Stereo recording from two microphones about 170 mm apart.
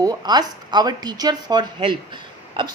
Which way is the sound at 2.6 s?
30° right (ahead or behind).